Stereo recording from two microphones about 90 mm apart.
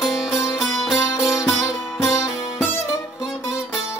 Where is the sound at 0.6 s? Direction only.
Centre (ahead or behind).